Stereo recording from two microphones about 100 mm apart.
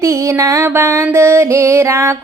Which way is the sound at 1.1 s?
30° right (ahead or behind).